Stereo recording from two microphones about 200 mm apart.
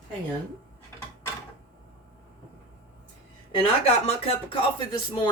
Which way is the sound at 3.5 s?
30° left (ahead or behind).